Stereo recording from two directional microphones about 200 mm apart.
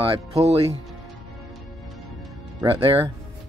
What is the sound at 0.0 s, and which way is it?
Speech, 30° right (ahead or behind).